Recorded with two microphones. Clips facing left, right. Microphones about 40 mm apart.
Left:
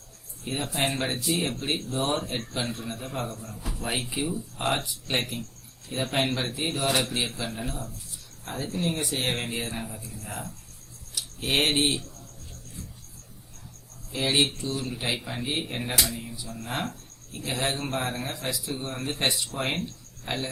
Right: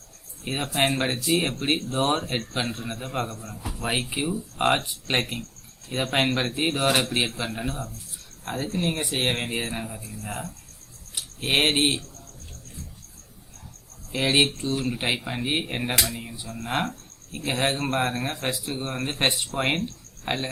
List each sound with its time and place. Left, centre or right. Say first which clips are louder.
0.4 s speech: right 4 dB; right
1.5 s speech: right 4 dB; right
4.1 s speech: right 2 dB; right
4.5 s speech: right 6 dB; right
5.9 s speech: right 3 dB; right
11.1 s speech: right 2 dB; right
14.1 s speech: right 3 dB; right
15.1 s speech: right 3 dB; right